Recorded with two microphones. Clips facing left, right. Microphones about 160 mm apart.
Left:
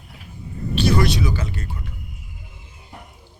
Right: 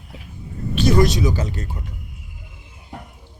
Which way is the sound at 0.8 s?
45° right (ahead or behind).